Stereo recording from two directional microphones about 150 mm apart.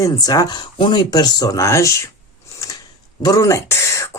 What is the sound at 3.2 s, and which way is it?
Speech, 20° left (ahead or behind).